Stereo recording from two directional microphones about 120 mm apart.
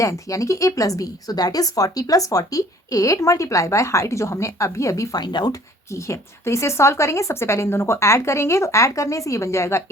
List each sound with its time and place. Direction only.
0.0 s a woman's voice: 25° left (ahead or behind)
5.9 s a woman's voice: 25° left (ahead or behind)